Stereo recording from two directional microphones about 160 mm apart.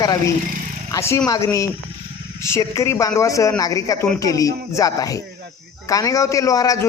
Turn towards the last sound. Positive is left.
turn(degrees=20)  # may be behind; listen again after turning